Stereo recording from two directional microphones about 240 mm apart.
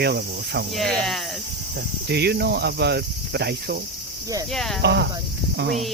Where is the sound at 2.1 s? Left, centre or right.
Right.